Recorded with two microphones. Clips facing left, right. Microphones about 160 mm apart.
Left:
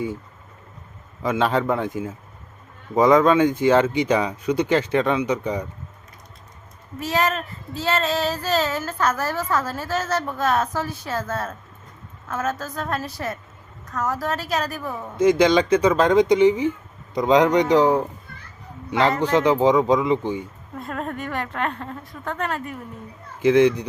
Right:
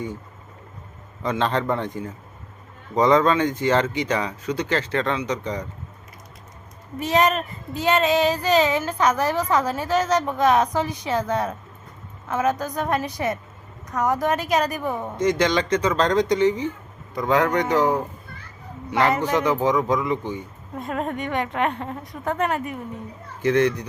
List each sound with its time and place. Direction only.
1.2 s a woman's voice: 10° left (ahead or behind)
7.0 s a woman's voice: centre (ahead or behind)
7.9 s a woman's voice: 15° right (ahead or behind)
15.2 s speech: 10° left (ahead or behind)
19.1 s a woman's voice: 10° right (ahead or behind)
19.4 s speech: 15° left (ahead or behind)
20.7 s a woman's voice: centre (ahead or behind)
23.4 s speech: 10° left (ahead or behind)